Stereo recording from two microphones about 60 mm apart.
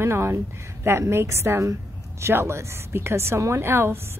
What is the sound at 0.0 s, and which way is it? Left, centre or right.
A woman's voice, right.